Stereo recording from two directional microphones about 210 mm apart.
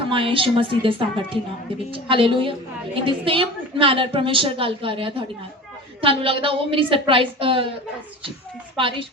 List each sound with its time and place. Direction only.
0.0 s a woman's voice: 25° right (ahead or behind)
8.7 s a woman's voice: 25° right (ahead or behind)